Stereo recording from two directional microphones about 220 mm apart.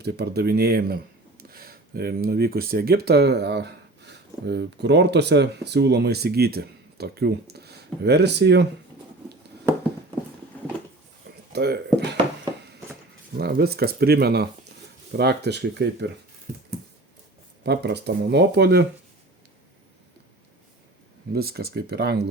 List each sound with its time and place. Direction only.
0.0 s speech: 45° right (ahead or behind)
11.5 s a sound: 45° right (ahead or behind)
13.4 s speech: 45° right (ahead or behind)
17.6 s speech: 50° right (ahead or behind)
21.3 s speech: 45° right (ahead or behind)